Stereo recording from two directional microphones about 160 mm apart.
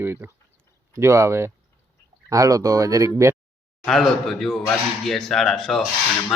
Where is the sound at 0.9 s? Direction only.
15° right (ahead or behind).